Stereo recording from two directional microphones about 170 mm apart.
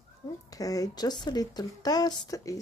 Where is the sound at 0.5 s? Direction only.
20° left (ahead or behind).